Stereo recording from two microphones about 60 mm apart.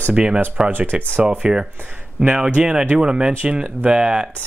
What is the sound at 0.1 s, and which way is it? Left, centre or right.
Speech, centre.